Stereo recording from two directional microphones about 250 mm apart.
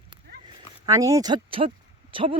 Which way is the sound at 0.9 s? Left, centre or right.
Centre.